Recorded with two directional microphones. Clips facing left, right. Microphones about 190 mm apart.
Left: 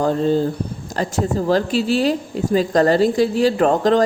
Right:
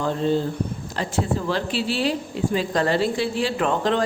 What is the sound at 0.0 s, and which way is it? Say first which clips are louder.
A woman's voice: left 5 dB; 40° left (ahead or behind).